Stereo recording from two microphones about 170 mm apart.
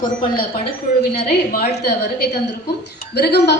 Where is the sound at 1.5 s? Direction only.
65° left (ahead or behind).